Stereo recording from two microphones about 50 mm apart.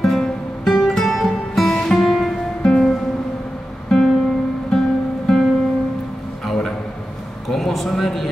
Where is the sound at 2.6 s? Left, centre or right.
Centre.